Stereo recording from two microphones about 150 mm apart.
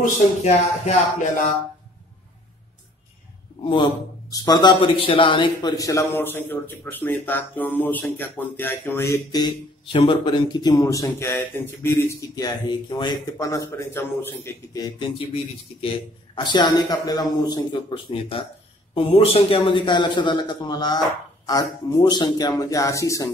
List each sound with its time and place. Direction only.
0.0 s speech: 50° left (ahead or behind)
3.6 s a man's voice: 30° left (ahead or behind)
9.9 s speech: 35° left (ahead or behind)
15.1 s speech: 40° left (ahead or behind); by 23.3 s 20° left (ahead or behind)